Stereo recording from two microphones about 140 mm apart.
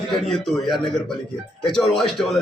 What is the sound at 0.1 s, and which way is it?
A man's voice, centre (ahead or behind).